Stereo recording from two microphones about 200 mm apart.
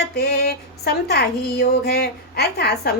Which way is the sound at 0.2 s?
55° left (ahead or behind).